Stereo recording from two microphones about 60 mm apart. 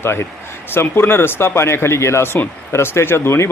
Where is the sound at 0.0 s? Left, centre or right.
Left.